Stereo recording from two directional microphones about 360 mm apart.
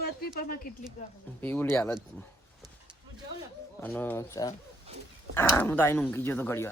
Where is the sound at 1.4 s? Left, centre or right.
Centre.